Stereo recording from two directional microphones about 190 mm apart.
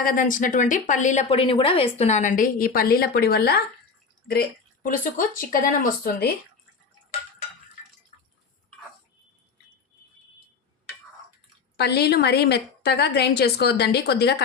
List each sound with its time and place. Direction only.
0.0 s a woman's voice: 45° left (ahead or behind)
11.8 s a woman's voice: 60° left (ahead or behind)